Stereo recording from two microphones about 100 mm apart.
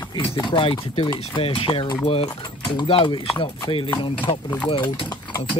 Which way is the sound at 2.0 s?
75° left (ahead or behind).